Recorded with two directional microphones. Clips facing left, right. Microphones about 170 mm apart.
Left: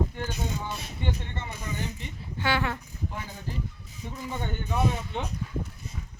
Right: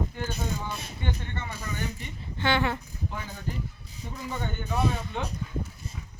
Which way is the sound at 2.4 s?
5° left (ahead or behind).